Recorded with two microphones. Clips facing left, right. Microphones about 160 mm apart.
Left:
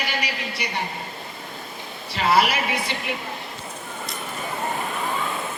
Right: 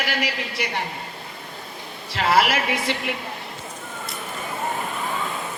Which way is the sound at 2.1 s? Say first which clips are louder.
Even; 90° right.